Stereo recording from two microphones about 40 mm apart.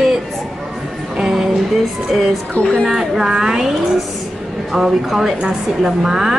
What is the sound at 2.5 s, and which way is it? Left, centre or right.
Speech, left.